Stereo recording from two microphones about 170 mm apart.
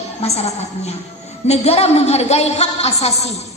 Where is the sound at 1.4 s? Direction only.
40° left (ahead or behind).